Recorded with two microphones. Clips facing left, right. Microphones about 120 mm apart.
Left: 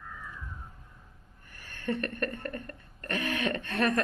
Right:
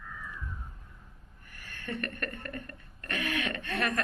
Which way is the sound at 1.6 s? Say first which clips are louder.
Left 5 dB; 30° left (ahead or behind).